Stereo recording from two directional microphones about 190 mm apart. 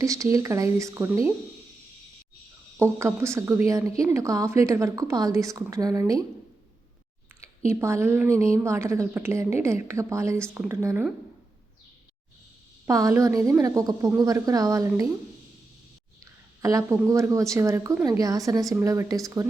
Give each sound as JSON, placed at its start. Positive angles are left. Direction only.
{"t": 0.0, "sound": "a woman's voice", "side_deg": -15}
{"t": 2.7, "sound": "a woman's voice", "side_deg": -15}
{"t": 7.7, "sound": "a woman's voice", "side_deg": -15}
{"t": 12.8, "sound": "a woman's voice", "side_deg": -15}
{"t": 16.2, "sound": "a woman's voice", "side_deg": -15}